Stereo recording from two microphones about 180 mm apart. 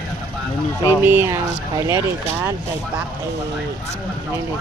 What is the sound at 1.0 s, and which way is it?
Speech, 10° right (ahead or behind).